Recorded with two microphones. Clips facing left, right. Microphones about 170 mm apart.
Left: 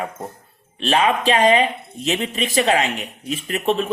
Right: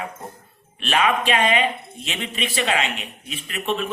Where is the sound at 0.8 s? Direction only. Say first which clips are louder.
Left 3 dB; 30° left (ahead or behind).